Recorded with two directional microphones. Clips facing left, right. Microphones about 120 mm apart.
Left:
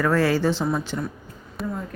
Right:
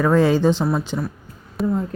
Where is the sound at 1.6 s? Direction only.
Centre (ahead or behind).